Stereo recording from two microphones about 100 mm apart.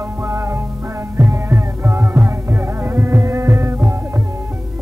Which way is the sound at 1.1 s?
25° right (ahead or behind).